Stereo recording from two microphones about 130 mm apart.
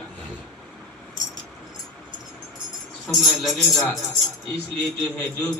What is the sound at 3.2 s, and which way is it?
Speech, centre (ahead or behind).